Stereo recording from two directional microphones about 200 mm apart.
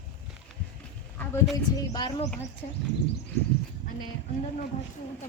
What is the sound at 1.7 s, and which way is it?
Speech, 20° left (ahead or behind).